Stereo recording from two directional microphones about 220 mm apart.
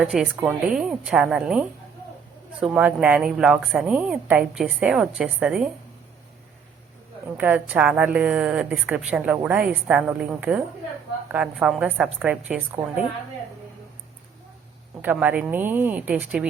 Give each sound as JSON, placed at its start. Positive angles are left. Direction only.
{"t": 0.0, "sound": "a woman's voice", "side_deg": -5}
{"t": 7.3, "sound": "a woman's voice", "side_deg": -5}
{"t": 15.0, "sound": "speech", "side_deg": -5}